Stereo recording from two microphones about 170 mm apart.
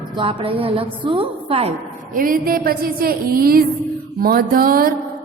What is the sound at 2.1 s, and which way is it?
A woman's voice, 55° right (ahead or behind).